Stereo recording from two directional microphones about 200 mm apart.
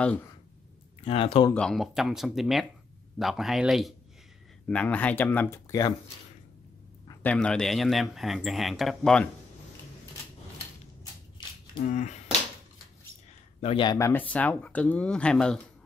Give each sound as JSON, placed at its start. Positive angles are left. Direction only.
{"t": 0.0, "sound": "speech", "side_deg": 5}
{"t": 1.0, "sound": "speech", "side_deg": 30}
{"t": 1.5, "sound": "speech", "side_deg": 5}
{"t": 7.2, "sound": "speech", "side_deg": 5}
{"t": 11.8, "sound": "speech", "side_deg": 40}
{"t": 13.6, "sound": "speech", "side_deg": 30}